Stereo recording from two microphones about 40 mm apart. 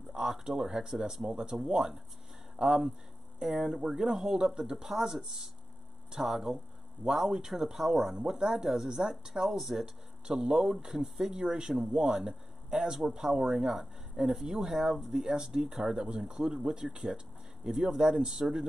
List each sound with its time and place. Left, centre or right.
0.1 s speech: centre
8.2 s speech: right
10.2 s speech: centre